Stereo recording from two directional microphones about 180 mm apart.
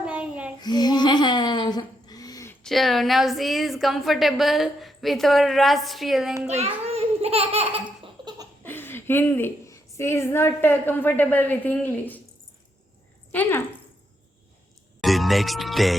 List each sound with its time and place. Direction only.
0.0 s child singing: 5° right (ahead or behind)
0.6 s a sound: 25° left (ahead or behind)
2.6 s a woman's voice: centre (ahead or behind)
6.5 s belly laugh: 35° right (ahead or behind)
8.6 s a woman's voice: 10° left (ahead or behind)
13.3 s speech: 10° left (ahead or behind)
15.0 s speech: centre (ahead or behind)